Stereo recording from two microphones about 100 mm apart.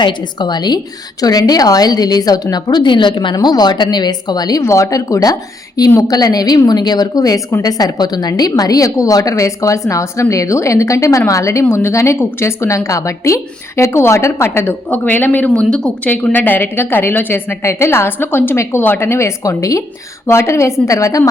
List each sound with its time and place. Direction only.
0.0 s a woman's voice: 45° left (ahead or behind)